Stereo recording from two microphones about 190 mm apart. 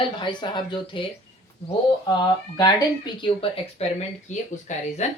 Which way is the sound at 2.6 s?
25° left (ahead or behind).